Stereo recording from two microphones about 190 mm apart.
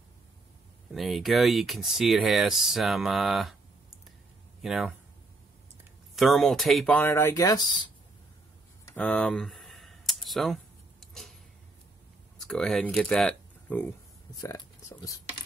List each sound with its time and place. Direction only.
0.9 s speech: centre (ahead or behind)
4.6 s speech: centre (ahead or behind)
6.1 s speech: centre (ahead or behind); by 7.9 s 25° left (ahead or behind)
8.8 s a sound: 5° left (ahead or behind)
12.4 s speech: centre (ahead or behind)